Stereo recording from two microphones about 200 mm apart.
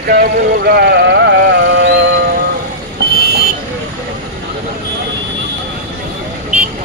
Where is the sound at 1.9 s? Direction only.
55° right (ahead or behind).